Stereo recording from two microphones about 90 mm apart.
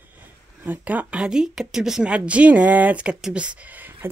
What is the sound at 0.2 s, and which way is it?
Speech, 20° right (ahead or behind).